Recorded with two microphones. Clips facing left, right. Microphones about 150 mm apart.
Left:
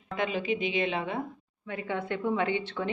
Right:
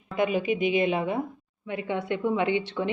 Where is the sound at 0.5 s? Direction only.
15° right (ahead or behind).